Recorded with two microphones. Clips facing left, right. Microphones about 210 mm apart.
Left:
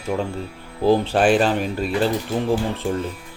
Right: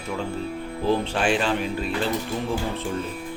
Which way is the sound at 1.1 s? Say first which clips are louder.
Left 6 dB; 40° left (ahead or behind).